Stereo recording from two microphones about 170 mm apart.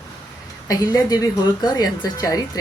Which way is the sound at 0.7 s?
20° left (ahead or behind).